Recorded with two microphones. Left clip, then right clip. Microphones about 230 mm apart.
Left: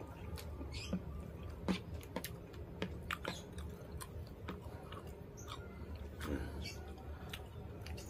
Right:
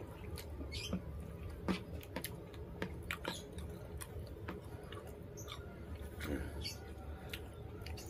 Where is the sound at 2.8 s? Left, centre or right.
Centre.